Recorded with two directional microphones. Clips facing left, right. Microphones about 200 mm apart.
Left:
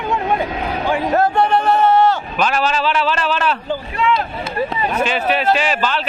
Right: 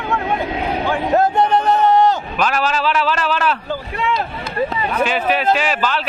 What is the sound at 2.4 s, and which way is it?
Speech, 5° right (ahead or behind).